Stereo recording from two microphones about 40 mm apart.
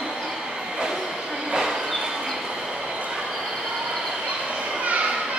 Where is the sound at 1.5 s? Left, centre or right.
Centre.